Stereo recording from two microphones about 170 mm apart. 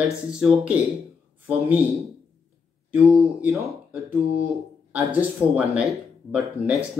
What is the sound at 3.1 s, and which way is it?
Speech, centre (ahead or behind).